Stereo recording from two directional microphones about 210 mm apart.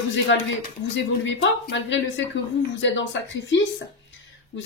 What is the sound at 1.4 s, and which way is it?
Speech, 60° left (ahead or behind).